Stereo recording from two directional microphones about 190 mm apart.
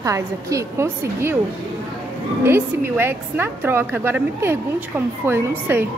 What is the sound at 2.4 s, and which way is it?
A woman's voice, 10° right (ahead or behind).